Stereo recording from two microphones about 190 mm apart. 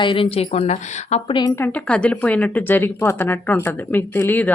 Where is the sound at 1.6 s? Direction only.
5° left (ahead or behind).